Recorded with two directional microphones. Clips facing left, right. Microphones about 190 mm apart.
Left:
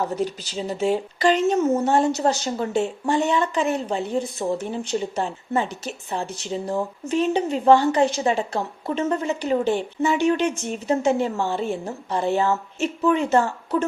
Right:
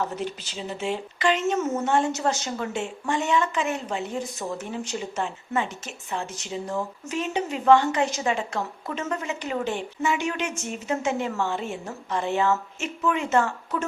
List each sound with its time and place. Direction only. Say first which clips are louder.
0.2 s speech: left 6 dB; 40° left (ahead or behind)